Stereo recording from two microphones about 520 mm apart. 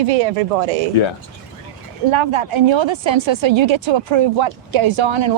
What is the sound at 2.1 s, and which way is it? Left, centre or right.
A woman's voice, right.